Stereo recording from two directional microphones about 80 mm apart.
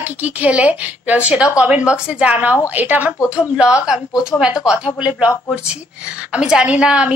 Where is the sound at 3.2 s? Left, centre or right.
Centre.